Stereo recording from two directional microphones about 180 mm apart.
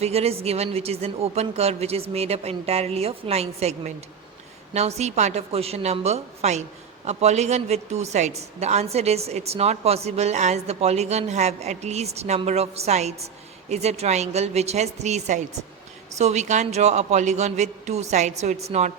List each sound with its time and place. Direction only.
0.0 s a woman's voice: 35° right (ahead or behind)